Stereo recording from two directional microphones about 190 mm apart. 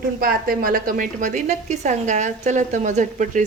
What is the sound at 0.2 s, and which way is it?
A woman's voice, 50° right (ahead or behind).